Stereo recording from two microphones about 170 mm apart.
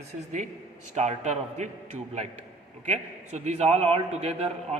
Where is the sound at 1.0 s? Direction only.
45° right (ahead or behind).